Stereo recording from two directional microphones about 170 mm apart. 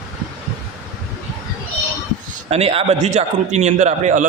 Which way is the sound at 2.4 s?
35° right (ahead or behind).